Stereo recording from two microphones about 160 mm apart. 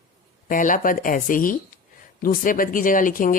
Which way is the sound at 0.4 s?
55° left (ahead or behind).